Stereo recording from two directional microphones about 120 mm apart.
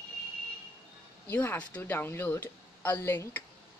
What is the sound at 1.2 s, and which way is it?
Speech, 15° left (ahead or behind).